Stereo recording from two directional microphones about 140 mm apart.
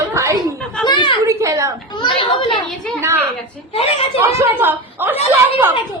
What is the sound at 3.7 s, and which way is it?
Speech, 45° left (ahead or behind).